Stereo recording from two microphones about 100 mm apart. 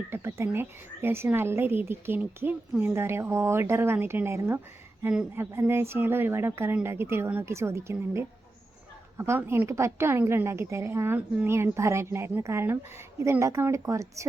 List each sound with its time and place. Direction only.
0.1 s speech: 25° right (ahead or behind)